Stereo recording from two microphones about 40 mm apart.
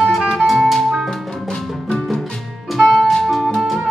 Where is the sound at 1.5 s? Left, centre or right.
Centre.